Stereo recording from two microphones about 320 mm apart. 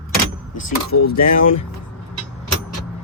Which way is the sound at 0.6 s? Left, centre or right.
Left.